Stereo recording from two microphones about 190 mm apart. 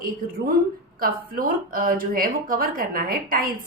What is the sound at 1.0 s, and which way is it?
A woman's voice, 50° right (ahead or behind).